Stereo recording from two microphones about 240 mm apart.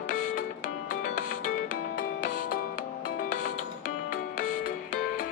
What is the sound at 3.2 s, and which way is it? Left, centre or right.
Music, left.